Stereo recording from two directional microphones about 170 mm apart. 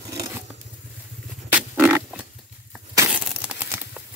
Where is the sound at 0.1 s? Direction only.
15° right (ahead or behind).